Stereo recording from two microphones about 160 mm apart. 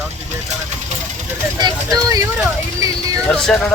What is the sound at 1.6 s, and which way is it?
Speech, 25° right (ahead or behind).